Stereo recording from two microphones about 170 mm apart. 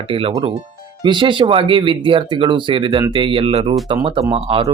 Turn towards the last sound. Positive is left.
turn(degrees=-35)  # may be behind; listen again after turning